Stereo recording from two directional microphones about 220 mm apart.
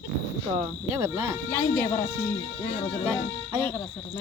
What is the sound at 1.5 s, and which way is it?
Speech, 10° left (ahead or behind).